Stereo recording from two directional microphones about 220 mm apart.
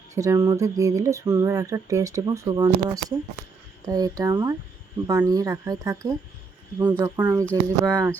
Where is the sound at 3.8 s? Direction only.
15° right (ahead or behind).